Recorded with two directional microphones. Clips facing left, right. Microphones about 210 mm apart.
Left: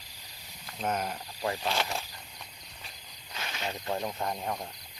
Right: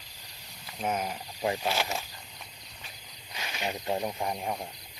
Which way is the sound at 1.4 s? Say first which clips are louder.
Right 3 dB; 20° right (ahead or behind).